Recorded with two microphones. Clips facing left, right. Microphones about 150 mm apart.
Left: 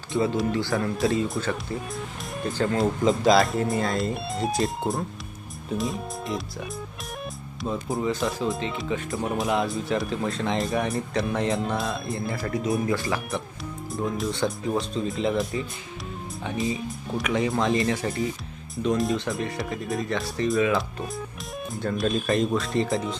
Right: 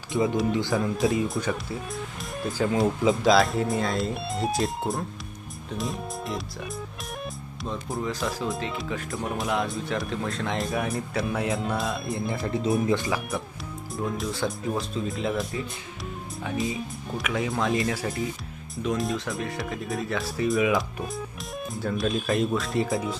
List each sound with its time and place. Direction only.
0.1 s speech: 5° right (ahead or behind)
0.5 s speech: 20° right (ahead or behind); by 12.2 s centre (ahead or behind)
12.5 s speech: 25° right (ahead or behind)
13.0 s speech: 5° right (ahead or behind)